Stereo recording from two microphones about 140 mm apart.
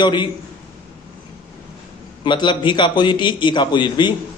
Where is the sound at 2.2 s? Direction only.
35° left (ahead or behind).